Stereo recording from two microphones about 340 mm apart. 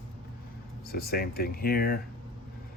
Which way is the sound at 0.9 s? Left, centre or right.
Left.